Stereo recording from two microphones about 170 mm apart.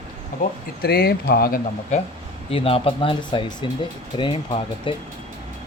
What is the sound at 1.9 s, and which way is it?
Speech, 40° left (ahead or behind).